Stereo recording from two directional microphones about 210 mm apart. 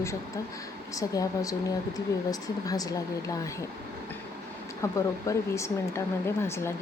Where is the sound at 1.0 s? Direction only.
15° left (ahead or behind).